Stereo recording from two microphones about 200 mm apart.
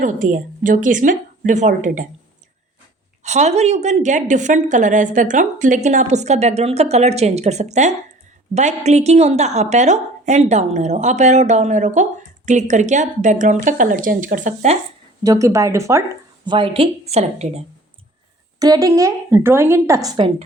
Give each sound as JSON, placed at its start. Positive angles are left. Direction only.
{"t": 0.0, "sound": "a woman's voice", "side_deg": -40}
{"t": 3.2, "sound": "a woman's voice", "side_deg": -35}
{"t": 15.2, "sound": "a woman's voice", "side_deg": -15}
{"t": 16.5, "sound": "a woman's voice", "side_deg": -25}
{"t": 18.6, "sound": "a woman's voice", "side_deg": -15}